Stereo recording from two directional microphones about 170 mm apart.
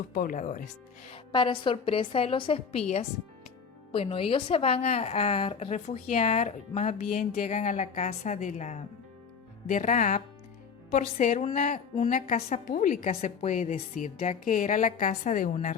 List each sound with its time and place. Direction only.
0.1 s a woman's voice: 55° left (ahead or behind)
1.1 s a woman's voice: 30° left (ahead or behind)
3.9 s a woman's voice: 35° left (ahead or behind); by 13.1 s 55° left (ahead or behind)
13.1 s a woman's voice: 45° left (ahead or behind)